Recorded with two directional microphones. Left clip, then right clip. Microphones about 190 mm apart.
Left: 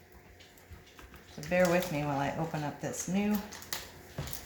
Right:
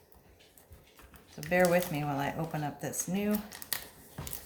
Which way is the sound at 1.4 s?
35° right (ahead or behind).